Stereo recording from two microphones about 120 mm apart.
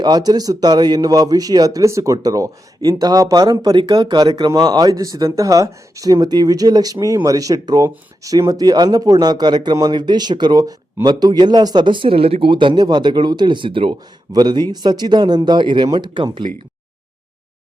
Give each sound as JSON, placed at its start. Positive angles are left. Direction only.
{"t": 0.0, "sound": "a man's voice", "side_deg": -35}